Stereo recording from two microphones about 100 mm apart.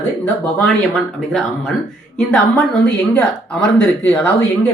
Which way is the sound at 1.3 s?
5° left (ahead or behind).